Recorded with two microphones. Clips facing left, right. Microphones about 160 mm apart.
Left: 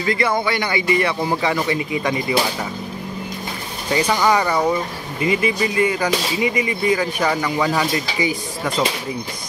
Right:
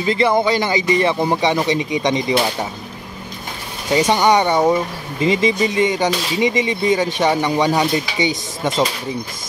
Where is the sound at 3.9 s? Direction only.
25° right (ahead or behind).